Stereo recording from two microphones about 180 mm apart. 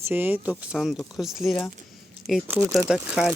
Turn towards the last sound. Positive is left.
turn(degrees=-5)  # may be behind; listen again after turning